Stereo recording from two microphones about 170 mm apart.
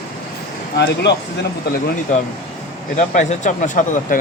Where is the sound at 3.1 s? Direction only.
45° left (ahead or behind).